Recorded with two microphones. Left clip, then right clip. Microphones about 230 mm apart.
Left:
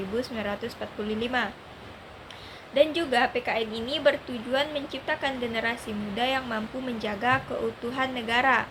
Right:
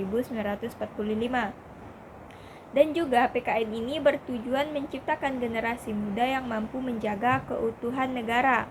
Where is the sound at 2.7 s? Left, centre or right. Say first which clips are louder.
Even; centre.